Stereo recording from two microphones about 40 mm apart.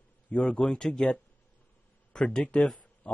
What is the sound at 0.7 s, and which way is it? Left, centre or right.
Speech, centre.